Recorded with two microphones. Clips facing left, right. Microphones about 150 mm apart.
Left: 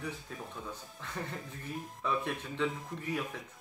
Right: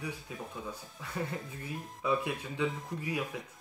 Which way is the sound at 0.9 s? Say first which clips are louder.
Right 4 dB; 10° right (ahead or behind).